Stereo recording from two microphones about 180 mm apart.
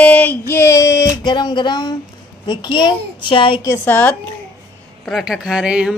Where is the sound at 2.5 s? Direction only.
25° left (ahead or behind).